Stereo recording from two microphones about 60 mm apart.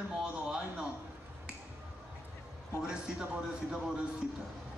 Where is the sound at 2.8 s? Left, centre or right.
Centre.